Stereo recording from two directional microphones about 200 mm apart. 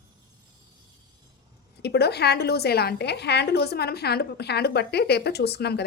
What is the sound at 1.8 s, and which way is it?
A woman's voice, 55° left (ahead or behind).